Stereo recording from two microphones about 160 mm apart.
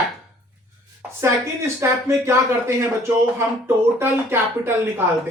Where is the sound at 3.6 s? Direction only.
15° right (ahead or behind).